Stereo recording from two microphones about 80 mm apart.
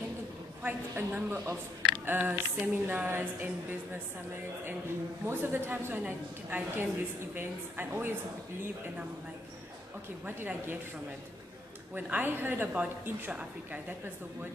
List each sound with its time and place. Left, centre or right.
0.6 s a woman's voice: right
5.2 s a woman's voice: right
10.2 s a woman's voice: right
11.9 s a woman's voice: right
13.3 s a woman's voice: centre